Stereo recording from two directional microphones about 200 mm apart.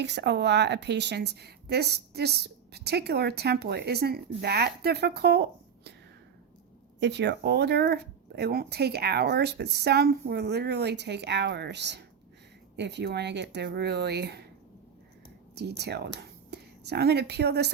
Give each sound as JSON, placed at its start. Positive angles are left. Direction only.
{"t": 0.0, "sound": "a woman's voice", "side_deg": -60}
{"t": 7.0, "sound": "a woman's voice", "side_deg": -60}
{"t": 15.5, "sound": "a woman's voice", "side_deg": -55}